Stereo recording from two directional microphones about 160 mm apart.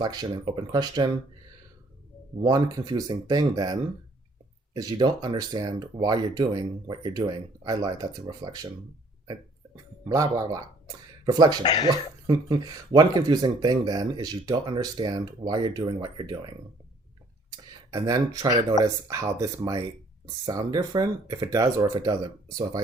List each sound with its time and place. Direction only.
0.0 s speech: 25° right (ahead or behind)
2.4 s speech: 25° right (ahead or behind)
10.1 s speech: 20° right (ahead or behind)
11.6 s speech: 25° left (ahead or behind)
12.3 s speech: 25° right (ahead or behind)
17.9 s speech: 25° right (ahead or behind)